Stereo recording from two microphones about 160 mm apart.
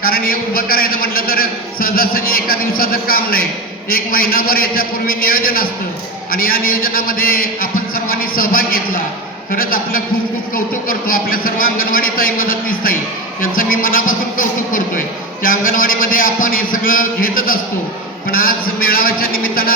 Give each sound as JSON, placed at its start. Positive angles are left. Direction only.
{"t": 0.0, "sound": "a man's voice", "side_deg": 65}